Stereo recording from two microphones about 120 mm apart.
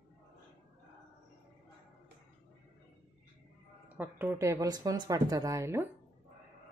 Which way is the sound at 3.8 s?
15° right (ahead or behind).